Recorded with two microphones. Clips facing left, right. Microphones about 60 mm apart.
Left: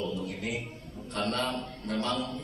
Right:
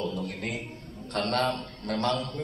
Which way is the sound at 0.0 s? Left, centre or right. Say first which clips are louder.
Right 1 dB; right.